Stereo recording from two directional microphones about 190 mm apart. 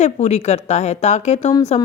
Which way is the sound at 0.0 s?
35° left (ahead or behind).